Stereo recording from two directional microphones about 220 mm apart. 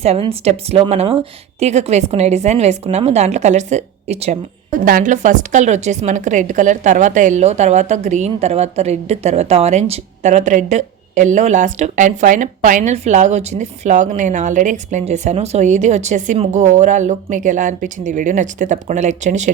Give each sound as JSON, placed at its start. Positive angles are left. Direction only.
{"t": 0.0, "sound": "speech", "side_deg": -25}